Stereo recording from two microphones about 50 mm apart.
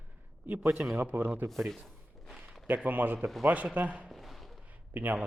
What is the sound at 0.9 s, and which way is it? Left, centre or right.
Speech, right.